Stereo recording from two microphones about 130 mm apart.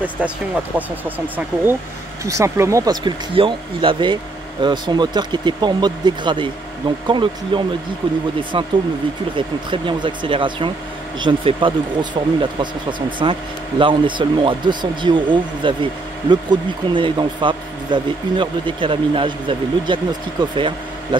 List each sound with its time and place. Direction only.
0.7 s speech: 15° right (ahead or behind); by 21.2 s 40° right (ahead or behind)